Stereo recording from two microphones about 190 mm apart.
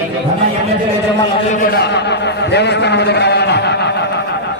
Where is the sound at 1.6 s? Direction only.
60° left (ahead or behind).